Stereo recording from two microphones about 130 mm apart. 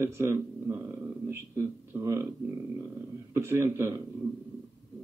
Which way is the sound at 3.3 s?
20° right (ahead or behind).